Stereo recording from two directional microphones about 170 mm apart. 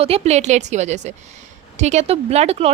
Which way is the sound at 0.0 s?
40° right (ahead or behind).